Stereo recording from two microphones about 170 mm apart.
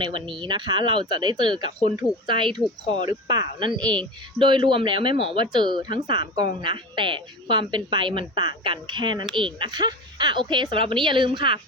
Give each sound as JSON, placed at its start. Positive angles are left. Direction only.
{"t": 0.0, "sound": "speech", "side_deg": -30}